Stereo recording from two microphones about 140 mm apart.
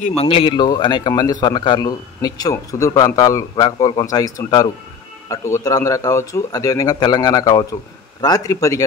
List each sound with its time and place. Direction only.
0.2 s a man's voice: 40° left (ahead or behind); by 8.8 s 25° left (ahead or behind)